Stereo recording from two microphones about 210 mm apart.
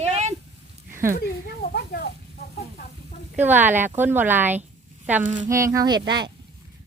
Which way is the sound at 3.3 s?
10° right (ahead or behind).